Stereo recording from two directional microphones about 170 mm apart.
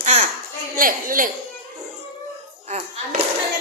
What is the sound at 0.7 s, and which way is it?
Speech, 55° right (ahead or behind).